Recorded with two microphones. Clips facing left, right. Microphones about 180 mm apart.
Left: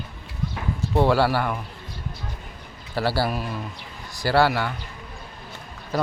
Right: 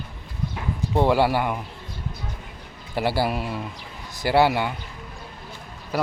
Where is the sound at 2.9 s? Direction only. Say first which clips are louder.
Right 1 dB; 15° right (ahead or behind).